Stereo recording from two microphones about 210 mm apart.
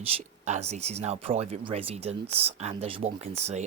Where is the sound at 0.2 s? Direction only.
30° right (ahead or behind).